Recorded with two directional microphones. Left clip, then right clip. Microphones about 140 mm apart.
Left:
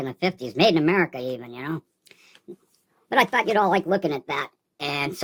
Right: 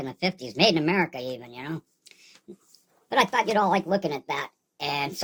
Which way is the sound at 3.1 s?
50° left (ahead or behind).